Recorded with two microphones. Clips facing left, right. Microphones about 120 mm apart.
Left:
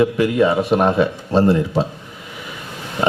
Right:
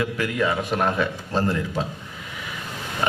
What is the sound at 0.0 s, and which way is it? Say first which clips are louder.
A man's voice: left 9 dB; 25° left (ahead or behind).